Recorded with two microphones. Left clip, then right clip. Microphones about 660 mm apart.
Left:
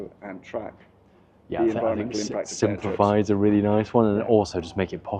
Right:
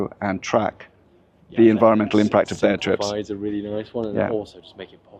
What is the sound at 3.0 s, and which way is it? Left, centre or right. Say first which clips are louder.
Speech: left 5 dB; left.